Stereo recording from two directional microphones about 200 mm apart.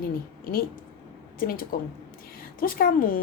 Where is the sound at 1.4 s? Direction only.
45° left (ahead or behind).